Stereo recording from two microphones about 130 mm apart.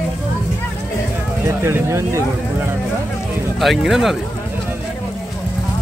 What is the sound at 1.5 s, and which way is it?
Speech, 20° right (ahead or behind).